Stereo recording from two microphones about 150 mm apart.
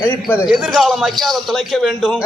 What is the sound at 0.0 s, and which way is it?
Speech, 15° left (ahead or behind).